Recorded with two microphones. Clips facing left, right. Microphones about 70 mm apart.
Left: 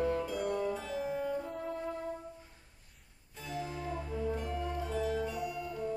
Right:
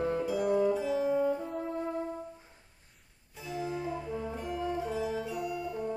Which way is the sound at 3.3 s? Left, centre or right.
Centre.